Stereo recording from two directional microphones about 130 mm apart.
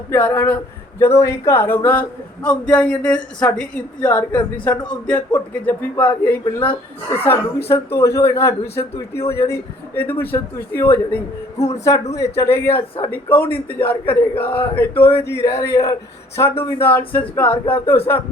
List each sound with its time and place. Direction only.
0.1 s speech: 15° left (ahead or behind)